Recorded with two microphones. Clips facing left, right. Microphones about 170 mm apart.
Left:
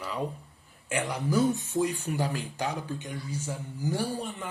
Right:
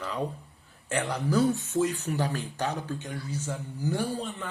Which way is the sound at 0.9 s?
10° left (ahead or behind).